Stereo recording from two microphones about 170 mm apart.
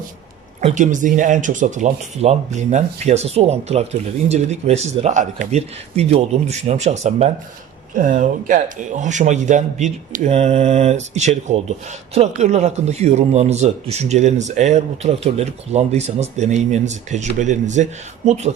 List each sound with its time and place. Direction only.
0.6 s speech: 45° right (ahead or behind)